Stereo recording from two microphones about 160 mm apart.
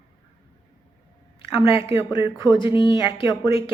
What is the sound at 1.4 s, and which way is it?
A woman's voice, 35° left (ahead or behind).